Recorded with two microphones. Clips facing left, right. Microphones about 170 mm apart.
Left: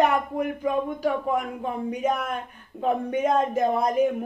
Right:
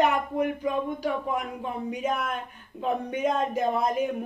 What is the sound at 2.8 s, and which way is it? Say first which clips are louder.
Speech: left 3 dB; 45° left (ahead or behind).